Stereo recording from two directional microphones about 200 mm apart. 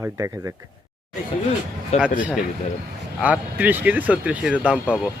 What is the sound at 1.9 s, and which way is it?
Speech, 30° left (ahead or behind).